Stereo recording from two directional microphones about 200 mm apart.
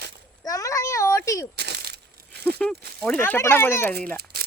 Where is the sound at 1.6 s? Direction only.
55° right (ahead or behind).